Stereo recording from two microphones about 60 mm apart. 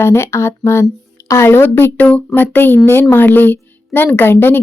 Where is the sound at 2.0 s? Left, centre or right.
Left.